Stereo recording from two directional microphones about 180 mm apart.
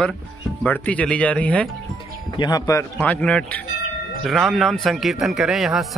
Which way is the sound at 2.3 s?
20° left (ahead or behind).